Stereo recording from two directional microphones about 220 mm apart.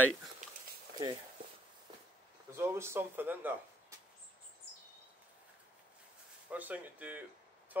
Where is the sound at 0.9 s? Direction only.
20° right (ahead or behind).